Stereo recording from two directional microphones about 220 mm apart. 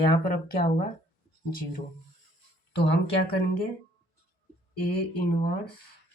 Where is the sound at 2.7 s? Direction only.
50° left (ahead or behind).